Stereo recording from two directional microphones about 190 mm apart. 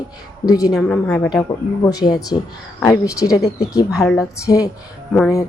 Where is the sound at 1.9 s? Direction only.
20° left (ahead or behind).